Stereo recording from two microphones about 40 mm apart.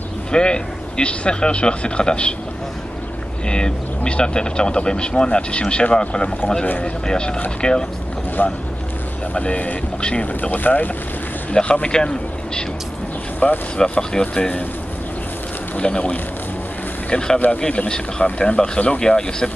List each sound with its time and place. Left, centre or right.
0.3 s speech: left
3.4 s speech: left
8.4 s speech: left
9.3 s speech: left
10.2 s speech: left
11.5 s a man's voice: left
13.4 s speech: left
13.7 s speech: left
15.8 s speech: left
17.4 s speech: left
18.9 s speech: centre